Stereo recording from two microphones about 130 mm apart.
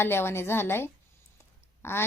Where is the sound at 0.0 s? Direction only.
20° left (ahead or behind).